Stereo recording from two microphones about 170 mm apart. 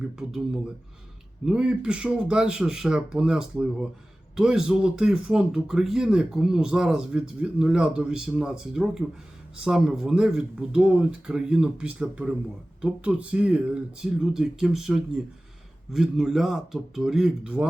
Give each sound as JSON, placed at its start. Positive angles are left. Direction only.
{"t": 0.2, "sound": "speech", "side_deg": -5}